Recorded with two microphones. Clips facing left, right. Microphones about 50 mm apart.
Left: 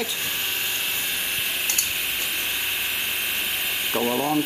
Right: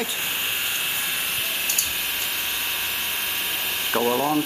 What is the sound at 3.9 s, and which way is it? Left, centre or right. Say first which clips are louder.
Speech: right 2 dB; centre.